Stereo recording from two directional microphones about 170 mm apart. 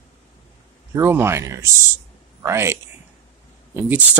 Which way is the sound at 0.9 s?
15° right (ahead or behind).